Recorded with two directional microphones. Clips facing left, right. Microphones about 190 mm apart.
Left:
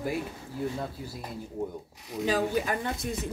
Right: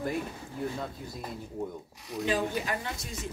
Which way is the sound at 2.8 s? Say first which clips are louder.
Left 6 dB; 55° left (ahead or behind).